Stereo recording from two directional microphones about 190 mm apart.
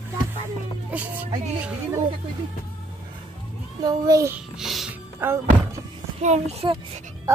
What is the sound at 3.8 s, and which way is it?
Speech, 20° right (ahead or behind).